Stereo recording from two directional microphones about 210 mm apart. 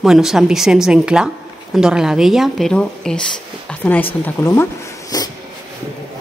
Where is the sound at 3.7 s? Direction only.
10° left (ahead or behind).